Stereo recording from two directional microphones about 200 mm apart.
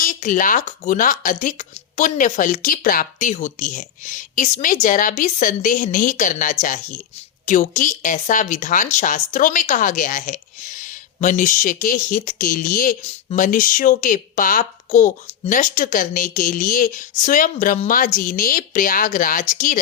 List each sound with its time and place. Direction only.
0.0 s speech: 40° left (ahead or behind)